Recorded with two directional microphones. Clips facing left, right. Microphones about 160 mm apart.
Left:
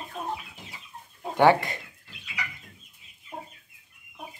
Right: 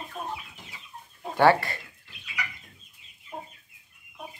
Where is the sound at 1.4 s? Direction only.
15° left (ahead or behind).